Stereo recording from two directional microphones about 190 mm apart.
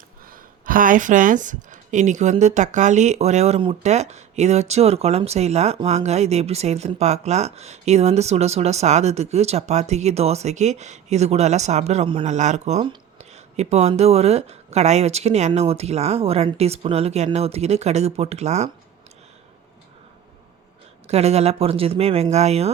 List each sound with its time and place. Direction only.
0.3 s speech: 45° right (ahead or behind)
21.1 s speech: 35° right (ahead or behind)